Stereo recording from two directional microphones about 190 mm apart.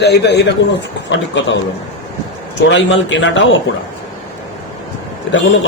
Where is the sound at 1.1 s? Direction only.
75° left (ahead or behind).